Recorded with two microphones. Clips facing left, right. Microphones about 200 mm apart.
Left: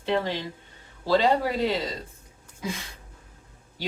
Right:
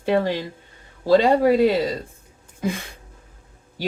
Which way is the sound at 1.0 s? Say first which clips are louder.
Right 6 dB; 50° right (ahead or behind).